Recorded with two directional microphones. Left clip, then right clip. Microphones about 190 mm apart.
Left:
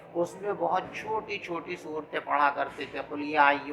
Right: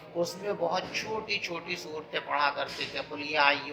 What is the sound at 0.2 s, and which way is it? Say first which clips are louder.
Speech: left 1 dB; 10° left (ahead or behind).